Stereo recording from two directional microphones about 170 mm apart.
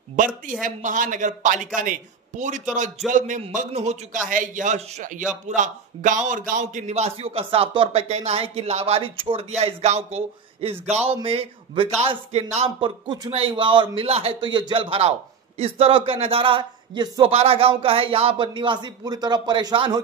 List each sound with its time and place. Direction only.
0.1 s a man's voice: 50° right (ahead or behind); by 20.0 s 25° right (ahead or behind)